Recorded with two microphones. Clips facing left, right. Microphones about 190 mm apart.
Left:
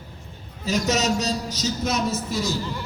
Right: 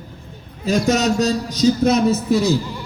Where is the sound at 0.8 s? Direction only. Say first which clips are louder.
Right 6 dB; 55° right (ahead or behind).